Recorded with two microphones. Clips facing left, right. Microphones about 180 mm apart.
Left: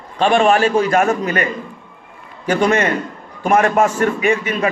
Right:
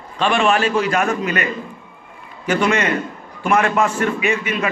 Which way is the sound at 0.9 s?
30° left (ahead or behind).